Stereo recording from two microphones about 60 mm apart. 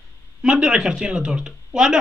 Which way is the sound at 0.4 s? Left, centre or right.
Centre.